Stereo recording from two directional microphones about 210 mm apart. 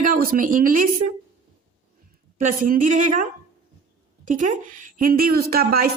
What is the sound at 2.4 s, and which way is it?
Speech, 40° right (ahead or behind).